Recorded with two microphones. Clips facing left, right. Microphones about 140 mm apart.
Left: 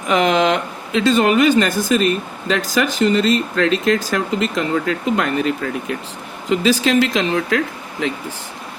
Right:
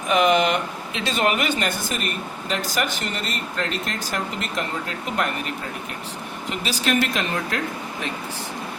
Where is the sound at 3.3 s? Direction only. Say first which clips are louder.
Left 11 dB; 90° left.